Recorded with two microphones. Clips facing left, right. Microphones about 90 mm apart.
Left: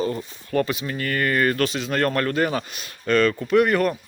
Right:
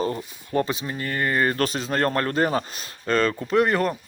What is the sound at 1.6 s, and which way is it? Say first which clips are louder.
Speech: left 1 dB; 35° right (ahead or behind).